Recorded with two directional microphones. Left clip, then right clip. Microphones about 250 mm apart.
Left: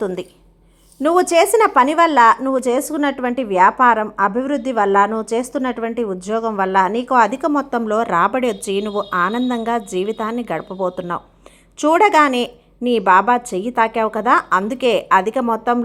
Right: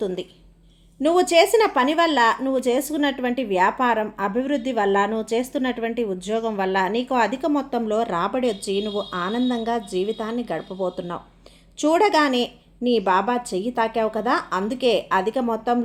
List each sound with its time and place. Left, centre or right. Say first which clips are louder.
0.0 s a woman's voice: left 4 dB; centre